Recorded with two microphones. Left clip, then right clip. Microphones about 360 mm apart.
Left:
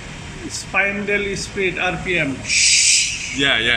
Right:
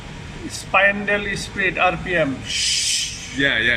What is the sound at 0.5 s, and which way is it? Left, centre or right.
A man's voice, right.